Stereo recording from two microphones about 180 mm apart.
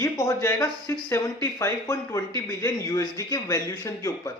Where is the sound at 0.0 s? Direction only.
15° left (ahead or behind).